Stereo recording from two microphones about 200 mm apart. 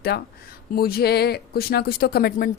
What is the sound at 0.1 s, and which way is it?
Speech, 55° left (ahead or behind).